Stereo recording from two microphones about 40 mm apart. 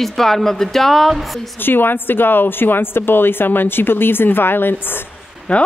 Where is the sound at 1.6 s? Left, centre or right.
Left.